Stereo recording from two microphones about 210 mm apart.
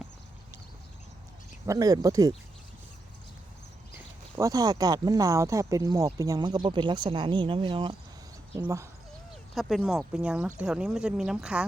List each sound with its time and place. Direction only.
1.6 s speech: 15° right (ahead or behind)
3.9 s speech: 15° right (ahead or behind)
9.6 s speech: centre (ahead or behind)